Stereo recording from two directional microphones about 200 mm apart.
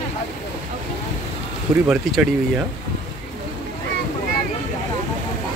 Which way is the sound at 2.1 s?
Centre (ahead or behind).